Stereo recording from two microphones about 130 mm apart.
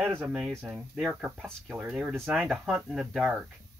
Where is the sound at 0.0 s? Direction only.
15° right (ahead or behind).